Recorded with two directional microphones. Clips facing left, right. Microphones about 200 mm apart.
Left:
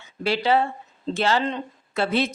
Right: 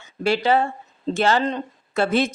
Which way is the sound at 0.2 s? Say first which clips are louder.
Right 2 dB; 45° right (ahead or behind).